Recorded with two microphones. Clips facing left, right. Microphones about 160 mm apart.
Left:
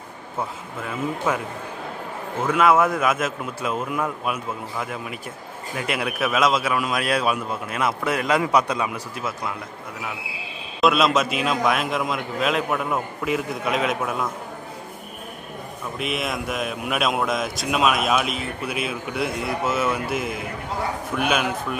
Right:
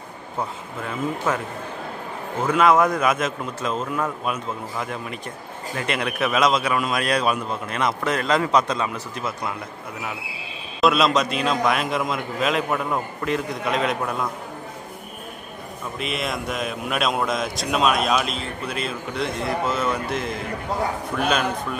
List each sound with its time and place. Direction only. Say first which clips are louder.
0.4 s a man's voice: right 1 dB; 5° left (ahead or behind)
2.4 s a man's voice: right 1 dB; 5° left (ahead or behind)
10.8 s a man's voice: even; centre (ahead or behind)
16.0 s a man's voice: left 1 dB; centre (ahead or behind)